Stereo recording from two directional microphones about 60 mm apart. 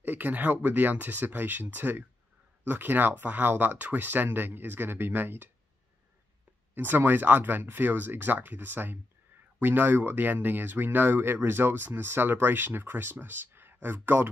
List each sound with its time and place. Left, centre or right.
0.0 s speech: right
6.7 s speech: right